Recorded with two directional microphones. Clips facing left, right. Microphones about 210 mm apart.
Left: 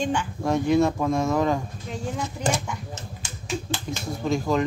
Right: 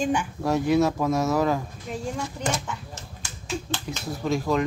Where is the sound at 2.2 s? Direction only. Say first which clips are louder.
Left 2 dB; 15° left (ahead or behind).